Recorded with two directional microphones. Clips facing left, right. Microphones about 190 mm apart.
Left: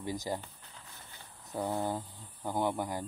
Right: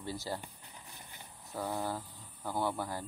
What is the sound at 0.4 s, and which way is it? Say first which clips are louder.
Cricket: even; 15° right (ahead or behind).